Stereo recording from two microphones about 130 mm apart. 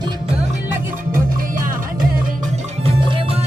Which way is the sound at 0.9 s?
90° right.